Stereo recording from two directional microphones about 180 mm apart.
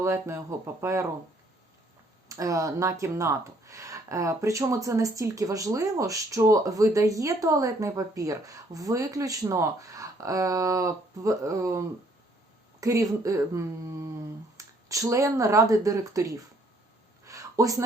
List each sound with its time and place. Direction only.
0.0 s speech: 15° right (ahead or behind)
2.3 s speech: 15° right (ahead or behind)
12.8 s speech: 20° right (ahead or behind)
17.2 s a sound: 20° right (ahead or behind)